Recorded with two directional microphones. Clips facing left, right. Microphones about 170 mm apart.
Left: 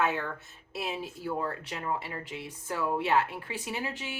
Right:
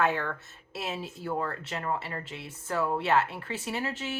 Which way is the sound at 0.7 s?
15° left (ahead or behind).